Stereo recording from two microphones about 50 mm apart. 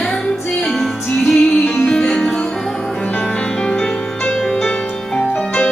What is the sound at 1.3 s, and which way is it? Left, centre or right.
Music, centre.